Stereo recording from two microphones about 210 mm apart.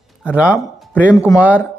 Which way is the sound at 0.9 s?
10° left (ahead or behind).